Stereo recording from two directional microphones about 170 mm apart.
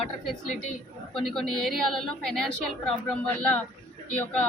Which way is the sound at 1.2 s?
Centre (ahead or behind).